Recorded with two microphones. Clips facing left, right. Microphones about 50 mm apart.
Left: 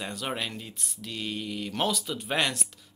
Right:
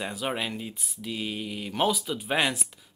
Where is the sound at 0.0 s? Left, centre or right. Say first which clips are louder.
Right 2 dB; centre.